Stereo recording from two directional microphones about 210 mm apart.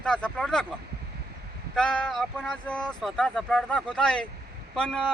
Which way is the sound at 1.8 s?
5° left (ahead or behind).